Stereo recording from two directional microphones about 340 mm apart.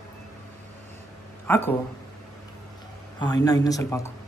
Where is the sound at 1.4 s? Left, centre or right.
Centre.